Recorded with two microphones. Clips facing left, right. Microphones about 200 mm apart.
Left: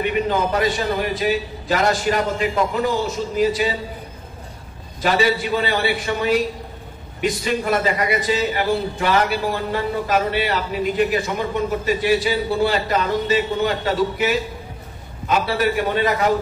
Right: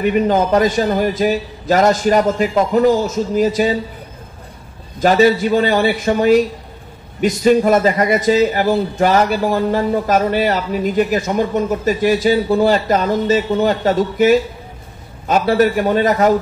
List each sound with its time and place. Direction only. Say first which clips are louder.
0.3 s a man's voice: right 6 dB; 45° right (ahead or behind)
5.0 s a man's voice: right 7 dB; 45° right (ahead or behind)